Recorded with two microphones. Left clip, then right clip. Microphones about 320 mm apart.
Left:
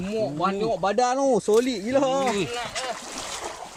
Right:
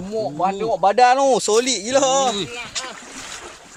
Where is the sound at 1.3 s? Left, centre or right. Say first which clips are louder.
Right 4 dB; right.